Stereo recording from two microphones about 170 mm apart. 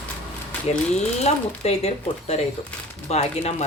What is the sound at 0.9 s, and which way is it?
Speech, 40° left (ahead or behind).